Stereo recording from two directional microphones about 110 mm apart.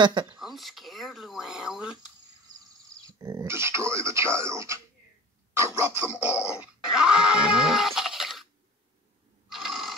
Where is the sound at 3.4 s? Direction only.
25° right (ahead or behind).